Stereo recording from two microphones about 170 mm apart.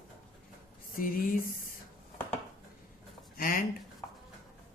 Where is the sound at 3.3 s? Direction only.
55° left (ahead or behind).